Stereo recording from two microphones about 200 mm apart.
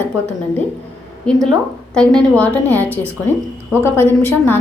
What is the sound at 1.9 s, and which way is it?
A woman's voice, 5° left (ahead or behind).